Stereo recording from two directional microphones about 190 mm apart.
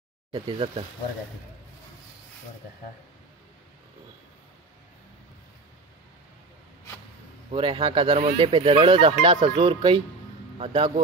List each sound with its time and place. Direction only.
7.5 s speech: 30° right (ahead or behind)